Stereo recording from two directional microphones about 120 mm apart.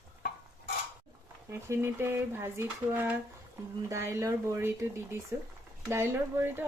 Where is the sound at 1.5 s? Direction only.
20° right (ahead or behind).